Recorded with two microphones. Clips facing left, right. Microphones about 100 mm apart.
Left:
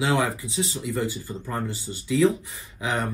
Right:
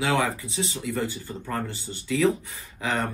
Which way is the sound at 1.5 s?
15° left (ahead or behind).